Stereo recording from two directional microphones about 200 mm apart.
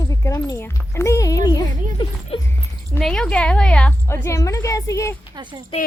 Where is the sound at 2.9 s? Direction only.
5° left (ahead or behind).